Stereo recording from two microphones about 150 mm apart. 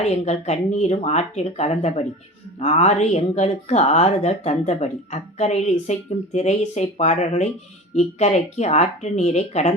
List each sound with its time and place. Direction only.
0.0 s speech: 45° left (ahead or behind)